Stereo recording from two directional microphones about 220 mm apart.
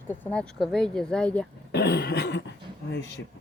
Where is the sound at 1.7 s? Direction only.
50° left (ahead or behind).